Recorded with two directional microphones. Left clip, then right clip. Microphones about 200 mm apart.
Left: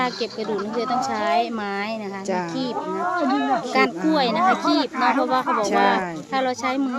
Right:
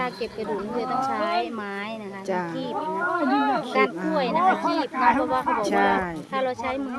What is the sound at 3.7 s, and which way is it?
Speech, 60° left (ahead or behind).